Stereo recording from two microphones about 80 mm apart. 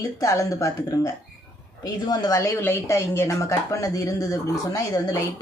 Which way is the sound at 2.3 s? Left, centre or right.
Left.